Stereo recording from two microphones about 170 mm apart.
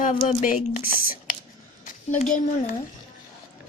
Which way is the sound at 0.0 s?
50° left (ahead or behind).